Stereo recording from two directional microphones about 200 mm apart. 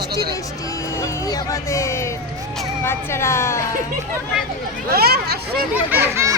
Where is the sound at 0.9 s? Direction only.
15° left (ahead or behind).